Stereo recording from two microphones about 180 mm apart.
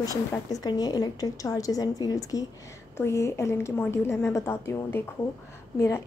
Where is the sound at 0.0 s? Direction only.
20° left (ahead or behind).